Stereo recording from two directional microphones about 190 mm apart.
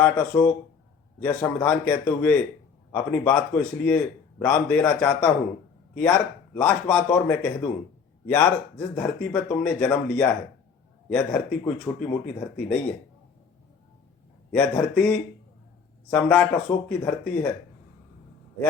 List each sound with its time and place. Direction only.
0.0 s a man's voice: 10° left (ahead or behind)
14.5 s a man's voice: 5° left (ahead or behind)